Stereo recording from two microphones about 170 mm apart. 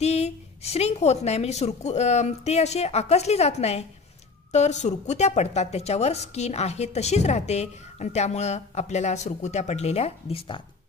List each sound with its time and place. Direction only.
0.0 s a woman's voice: 40° left (ahead or behind)